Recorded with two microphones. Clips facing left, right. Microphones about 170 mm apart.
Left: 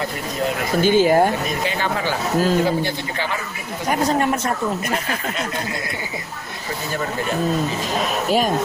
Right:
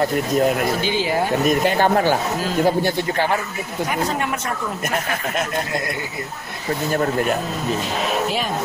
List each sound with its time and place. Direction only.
0.7 s speech: 45° left (ahead or behind)
1.6 s speech: 55° right (ahead or behind)